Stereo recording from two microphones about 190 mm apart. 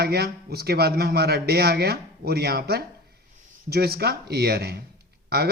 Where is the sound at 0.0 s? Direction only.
55° right (ahead or behind).